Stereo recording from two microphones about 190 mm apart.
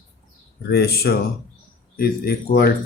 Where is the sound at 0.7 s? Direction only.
55° left (ahead or behind).